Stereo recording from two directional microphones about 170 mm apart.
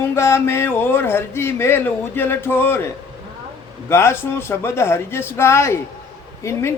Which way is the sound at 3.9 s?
15° left (ahead or behind).